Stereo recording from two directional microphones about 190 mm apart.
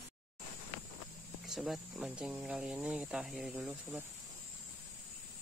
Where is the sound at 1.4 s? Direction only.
Centre (ahead or behind).